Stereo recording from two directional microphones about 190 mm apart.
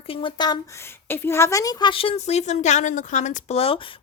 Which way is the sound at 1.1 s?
10° left (ahead or behind).